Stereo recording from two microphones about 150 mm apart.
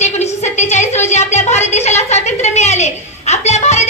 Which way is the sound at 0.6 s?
50° left (ahead or behind).